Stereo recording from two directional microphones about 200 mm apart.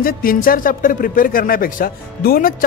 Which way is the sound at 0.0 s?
45° left (ahead or behind).